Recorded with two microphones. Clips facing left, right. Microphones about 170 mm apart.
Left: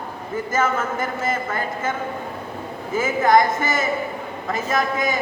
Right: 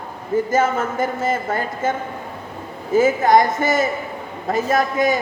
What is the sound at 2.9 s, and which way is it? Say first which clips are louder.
A man's voice: right 3 dB; 35° right (ahead or behind).